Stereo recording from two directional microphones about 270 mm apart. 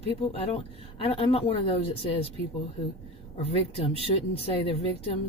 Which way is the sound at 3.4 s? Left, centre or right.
Left.